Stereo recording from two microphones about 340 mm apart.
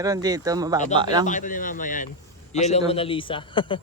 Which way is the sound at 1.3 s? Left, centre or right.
Left.